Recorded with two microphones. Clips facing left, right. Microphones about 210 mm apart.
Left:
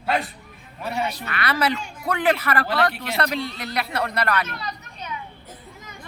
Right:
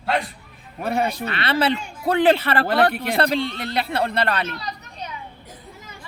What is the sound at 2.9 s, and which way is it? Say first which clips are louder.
Speech: right 5 dB; 55° right (ahead or behind).